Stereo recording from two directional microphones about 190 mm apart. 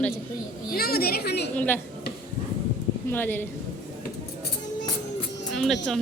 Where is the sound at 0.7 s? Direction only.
55° left (ahead or behind).